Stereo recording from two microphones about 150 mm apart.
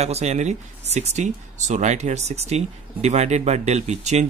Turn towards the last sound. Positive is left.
turn(degrees=-50)  # may be behind; listen again after turning